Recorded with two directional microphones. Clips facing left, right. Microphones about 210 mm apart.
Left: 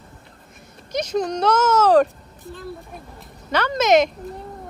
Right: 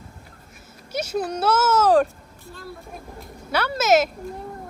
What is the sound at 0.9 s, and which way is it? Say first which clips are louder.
Speech: left 3 dB; 10° right (ahead or behind).